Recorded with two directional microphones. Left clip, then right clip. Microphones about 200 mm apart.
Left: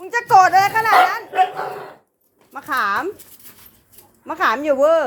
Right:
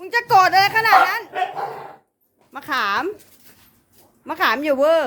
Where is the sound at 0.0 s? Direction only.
25° right (ahead or behind).